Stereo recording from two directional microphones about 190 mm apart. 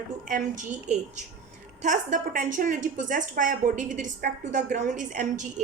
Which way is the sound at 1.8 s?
40° right (ahead or behind).